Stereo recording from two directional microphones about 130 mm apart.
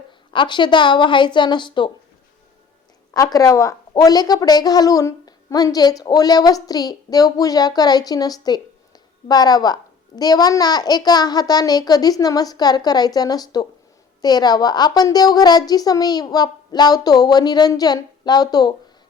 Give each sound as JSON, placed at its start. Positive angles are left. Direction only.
{"t": 0.3, "sound": "a woman's voice", "side_deg": 35}
{"t": 3.1, "sound": "a woman's voice", "side_deg": 25}